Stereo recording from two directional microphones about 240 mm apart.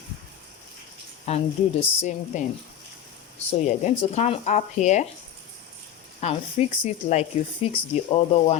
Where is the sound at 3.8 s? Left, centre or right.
Left.